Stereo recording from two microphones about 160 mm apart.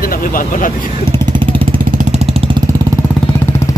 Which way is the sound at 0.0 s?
65° left (ahead or behind).